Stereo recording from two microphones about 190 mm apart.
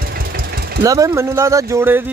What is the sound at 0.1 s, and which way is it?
Vehicle, 55° right (ahead or behind).